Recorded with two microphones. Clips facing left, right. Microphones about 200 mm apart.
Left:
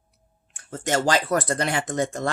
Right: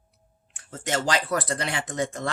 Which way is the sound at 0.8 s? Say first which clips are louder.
Left 4 dB; 45° left (ahead or behind).